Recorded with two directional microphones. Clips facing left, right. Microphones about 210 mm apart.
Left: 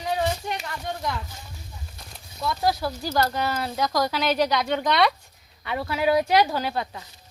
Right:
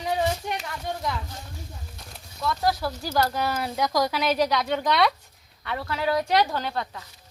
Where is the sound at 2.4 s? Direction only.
5° left (ahead or behind).